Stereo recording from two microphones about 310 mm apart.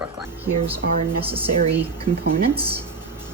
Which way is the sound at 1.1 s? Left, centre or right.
Centre.